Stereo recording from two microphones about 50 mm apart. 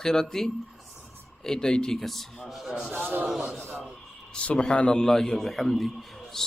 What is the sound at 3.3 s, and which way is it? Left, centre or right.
Speech, centre.